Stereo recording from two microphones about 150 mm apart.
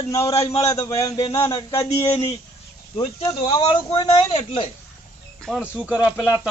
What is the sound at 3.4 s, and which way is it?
A man's voice, 30° left (ahead or behind).